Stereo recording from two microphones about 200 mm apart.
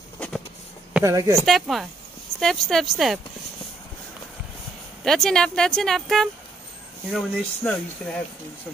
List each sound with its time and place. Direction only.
0.2 s a sound: 5° left (ahead or behind)
1.0 s speech: 15° right (ahead or behind)
1.4 s speech: centre (ahead or behind)
5.0 s speech: centre (ahead or behind)